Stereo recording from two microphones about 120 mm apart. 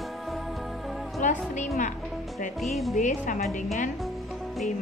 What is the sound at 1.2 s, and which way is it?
Speech, 90° left.